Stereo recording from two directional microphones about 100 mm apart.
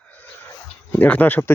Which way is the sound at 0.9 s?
15° left (ahead or behind).